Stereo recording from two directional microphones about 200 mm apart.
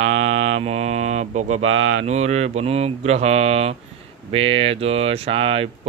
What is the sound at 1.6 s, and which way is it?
Speech, 70° right (ahead or behind).